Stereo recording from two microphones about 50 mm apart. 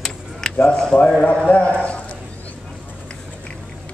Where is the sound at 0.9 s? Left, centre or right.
Left.